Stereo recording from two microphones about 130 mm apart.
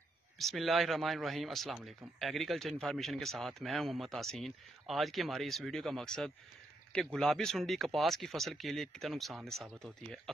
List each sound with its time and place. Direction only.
0.4 s speech: centre (ahead or behind)